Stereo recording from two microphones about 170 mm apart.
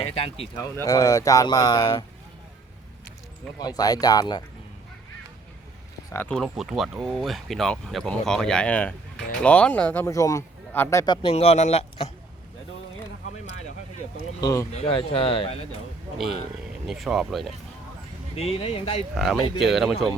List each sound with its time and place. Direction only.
0.5 s speech: 15° left (ahead or behind)
3.6 s speech: 25° left (ahead or behind)
6.1 s speech: 10° left (ahead or behind)
6.3 s speech: centre (ahead or behind); by 12.1 s 35° left (ahead or behind)
14.4 s speech: 20° left (ahead or behind)
14.7 s speech: 35° left (ahead or behind)
16.8 s speech: centre (ahead or behind)
18.3 s speech: 35° left (ahead or behind)
19.1 s speech: centre (ahead or behind)